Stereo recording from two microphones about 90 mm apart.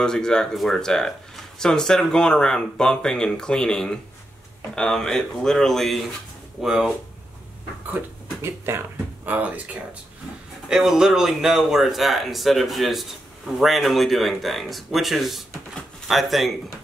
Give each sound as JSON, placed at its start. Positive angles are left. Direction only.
{"t": 0.0, "sound": "speech", "side_deg": 10}
{"t": 7.9, "sound": "speech", "side_deg": -25}
{"t": 10.7, "sound": "speech", "side_deg": -5}